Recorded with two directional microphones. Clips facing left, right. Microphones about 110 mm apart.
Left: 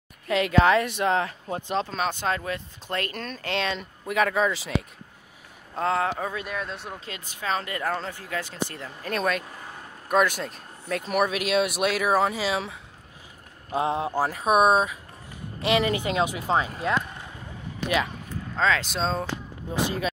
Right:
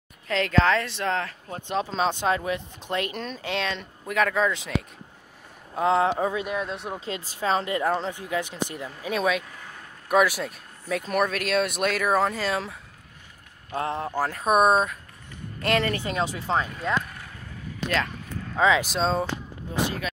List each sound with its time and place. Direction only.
0.3 s speech: 10° left (ahead or behind)
1.9 s speech: 20° right (ahead or behind); by 4.8 s centre (ahead or behind)
5.8 s speech: 15° right (ahead or behind); by 12.7 s centre (ahead or behind)
13.7 s speech: 15° left (ahead or behind)
14.4 s speech: centre (ahead or behind)
17.8 s speech: 10° left (ahead or behind)
18.6 s speech: 15° right (ahead or behind)
18.9 s speech: centre (ahead or behind)